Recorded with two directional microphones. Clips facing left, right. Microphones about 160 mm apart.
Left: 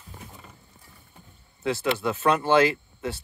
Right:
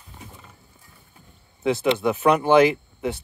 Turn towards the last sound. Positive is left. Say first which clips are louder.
# right 4 dB
turn(degrees=-20)  # may be behind; listen again after turning